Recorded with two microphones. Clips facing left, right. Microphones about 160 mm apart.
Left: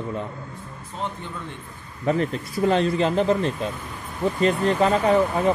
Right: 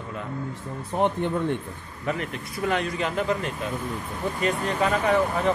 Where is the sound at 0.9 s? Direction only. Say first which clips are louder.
Right 9 dB; 60° right (ahead or behind).